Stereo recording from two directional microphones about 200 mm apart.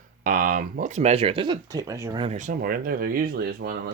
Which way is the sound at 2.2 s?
35° right (ahead or behind).